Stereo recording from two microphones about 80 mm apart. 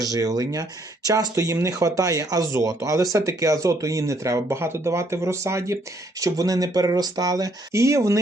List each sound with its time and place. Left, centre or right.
0.0 s speech: right
7.7 s speech: right